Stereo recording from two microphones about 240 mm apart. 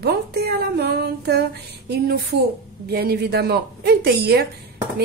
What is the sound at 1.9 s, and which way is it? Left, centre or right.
A woman's voice, right.